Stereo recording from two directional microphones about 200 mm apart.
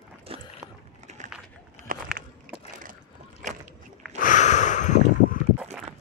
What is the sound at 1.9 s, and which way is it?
Biting, 45° right (ahead or behind).